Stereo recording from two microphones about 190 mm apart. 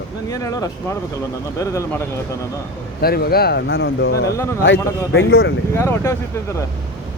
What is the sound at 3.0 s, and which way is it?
Speech, 55° left (ahead or behind).